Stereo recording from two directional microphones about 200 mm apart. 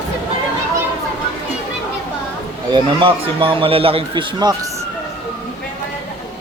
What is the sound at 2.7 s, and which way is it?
A man's voice, 25° right (ahead or behind).